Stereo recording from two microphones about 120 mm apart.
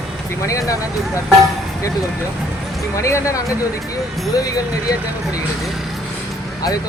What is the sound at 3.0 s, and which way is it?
Speech, 25° left (ahead or behind).